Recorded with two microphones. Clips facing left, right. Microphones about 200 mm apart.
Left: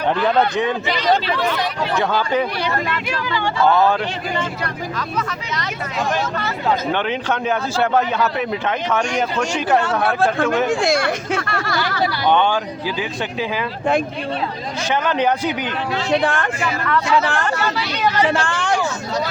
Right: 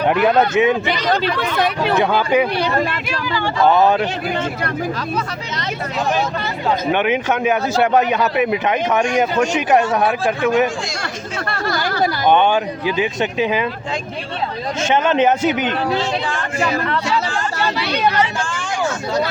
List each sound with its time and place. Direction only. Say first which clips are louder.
0.1 s speech: right 2 dB; 15° right (ahead or behind)
1.5 s speech: right 4 dB; 65° right (ahead or behind)
2.0 s speech: right 3 dB; 15° right (ahead or behind)
3.6 s speech: right 2 dB; 20° right (ahead or behind)
6.9 s speech: right 4 dB; 15° right (ahead or behind)
10.7 s speech: left 8 dB; 60° left (ahead or behind)
11.3 s speech: even; 40° right (ahead or behind)
12.3 s speech: right 3 dB; 20° right (ahead or behind)
14.8 s speech: right 4 dB; 25° right (ahead or behind)
16.2 s speech: left 4 dB; 60° left (ahead or behind)
16.6 s speech: right 2 dB; 35° right (ahead or behind)
17.2 s speech: left 2 dB; 65° left (ahead or behind)
17.7 s speech: right 2 dB; 60° right (ahead or behind)
18.3 s speech: left 5 dB; 65° left (ahead or behind)